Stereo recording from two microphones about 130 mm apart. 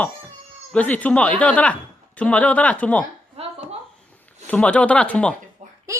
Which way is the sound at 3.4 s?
50° right (ahead or behind).